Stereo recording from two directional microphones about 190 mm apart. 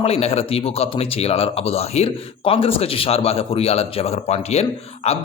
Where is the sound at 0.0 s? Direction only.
30° left (ahead or behind).